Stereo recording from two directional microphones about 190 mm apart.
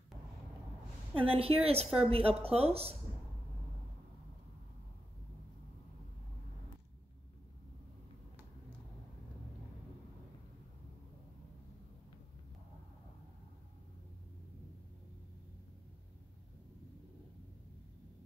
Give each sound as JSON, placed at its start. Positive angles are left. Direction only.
{"t": 1.1, "sound": "a woman's voice", "side_deg": -30}